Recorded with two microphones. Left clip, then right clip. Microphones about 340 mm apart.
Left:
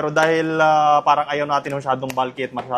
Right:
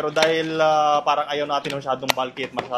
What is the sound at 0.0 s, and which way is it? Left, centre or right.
A man's voice, left.